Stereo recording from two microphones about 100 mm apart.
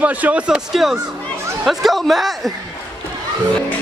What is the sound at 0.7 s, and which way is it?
Speech, 5° right (ahead or behind).